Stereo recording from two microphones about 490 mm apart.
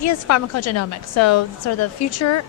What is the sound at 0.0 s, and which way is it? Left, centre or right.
A woman's voice, left.